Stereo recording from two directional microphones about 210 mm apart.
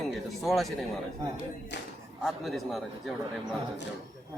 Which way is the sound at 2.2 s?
Centre (ahead or behind).